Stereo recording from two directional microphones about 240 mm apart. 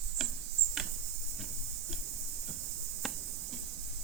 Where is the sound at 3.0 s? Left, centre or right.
Centre.